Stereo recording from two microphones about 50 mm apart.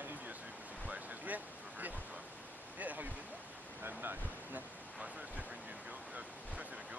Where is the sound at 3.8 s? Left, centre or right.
Right.